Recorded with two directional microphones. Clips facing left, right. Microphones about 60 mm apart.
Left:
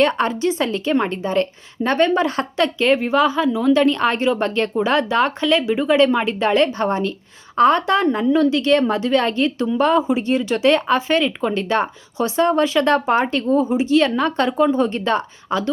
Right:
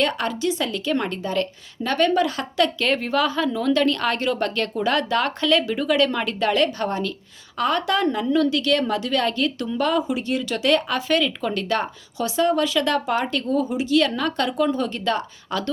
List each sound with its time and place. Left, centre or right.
0.0 s a woman's voice: left